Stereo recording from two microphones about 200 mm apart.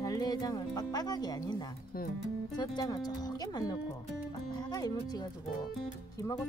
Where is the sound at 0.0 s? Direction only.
20° left (ahead or behind).